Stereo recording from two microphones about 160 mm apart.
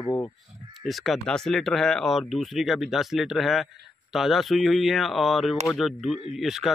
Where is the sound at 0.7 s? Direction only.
Centre (ahead or behind).